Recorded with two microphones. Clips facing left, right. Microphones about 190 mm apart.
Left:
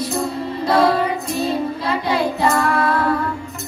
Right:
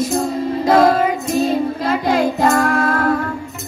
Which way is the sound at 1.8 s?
45° right (ahead or behind).